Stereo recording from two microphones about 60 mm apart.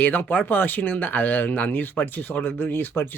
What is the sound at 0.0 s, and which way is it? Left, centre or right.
Speech, left.